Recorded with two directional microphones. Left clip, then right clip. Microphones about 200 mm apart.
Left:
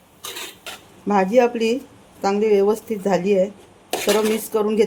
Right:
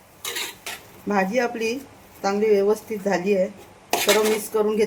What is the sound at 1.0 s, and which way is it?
Speech, 45° left (ahead or behind).